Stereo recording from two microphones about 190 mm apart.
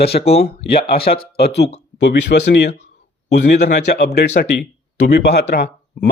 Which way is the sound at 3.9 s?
60° left (ahead or behind).